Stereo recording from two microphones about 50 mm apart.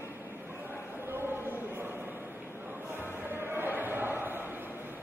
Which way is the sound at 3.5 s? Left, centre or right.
Right.